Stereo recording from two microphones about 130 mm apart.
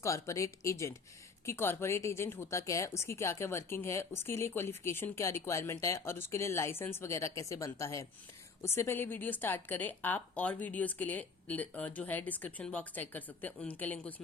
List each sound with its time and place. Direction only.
0.0 s a woman's voice: 25° left (ahead or behind)